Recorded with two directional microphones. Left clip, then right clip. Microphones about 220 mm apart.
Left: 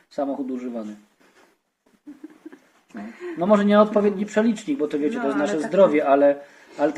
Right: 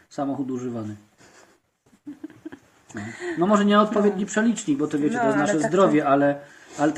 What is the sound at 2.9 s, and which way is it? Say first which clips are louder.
Speech: right 3 dB; 50° right (ahead or behind).